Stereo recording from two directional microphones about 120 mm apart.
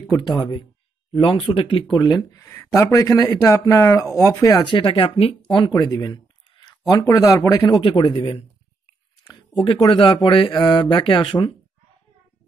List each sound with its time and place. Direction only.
0.3 s speech: 35° left (ahead or behind)
4.6 s speech: 40° left (ahead or behind)
5.8 s a sound: 30° left (ahead or behind)
6.9 s speech: 30° left (ahead or behind)
7.8 s speech: 45° left (ahead or behind)
9.9 s speech: 45° left (ahead or behind)